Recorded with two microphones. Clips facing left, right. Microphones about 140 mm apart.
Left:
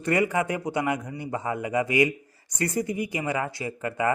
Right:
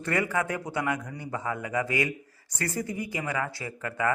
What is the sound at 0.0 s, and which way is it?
A man's voice, 20° left (ahead or behind).